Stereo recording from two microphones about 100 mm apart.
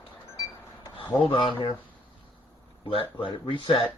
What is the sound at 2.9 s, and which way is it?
Speech, 60° left (ahead or behind).